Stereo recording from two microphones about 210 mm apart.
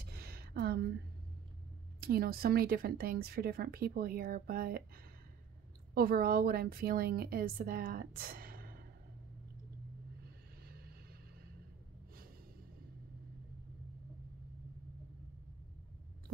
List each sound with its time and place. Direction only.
0.0 s a sound: 45° right (ahead or behind)
2.0 s speech: 45° right (ahead or behind)
5.9 s speech: 45° right (ahead or behind)